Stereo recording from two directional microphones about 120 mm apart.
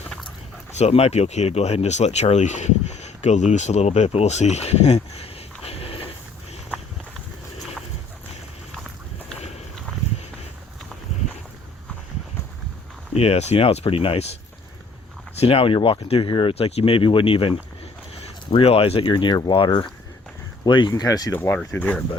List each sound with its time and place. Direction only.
0.8 s speech: 60° left (ahead or behind)
5.1 s a sound: 55° left (ahead or behind)
13.1 s speech: 55° left (ahead or behind)
15.4 s speech: 55° left (ahead or behind)
20.9 s speech: 30° left (ahead or behind); by 22.0 s 15° left (ahead or behind)